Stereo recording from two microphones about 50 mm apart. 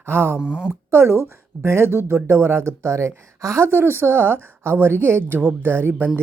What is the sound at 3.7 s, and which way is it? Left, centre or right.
Speech, right.